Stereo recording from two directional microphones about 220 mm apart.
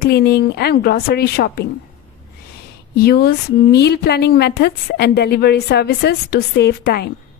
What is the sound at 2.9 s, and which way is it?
A woman's voice, 45° left (ahead or behind).